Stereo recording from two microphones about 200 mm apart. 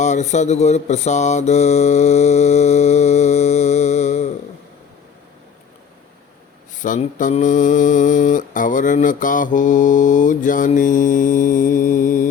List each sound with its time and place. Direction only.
0.0 s mantra: 35° left (ahead or behind)
6.8 s mantra: 40° left (ahead or behind)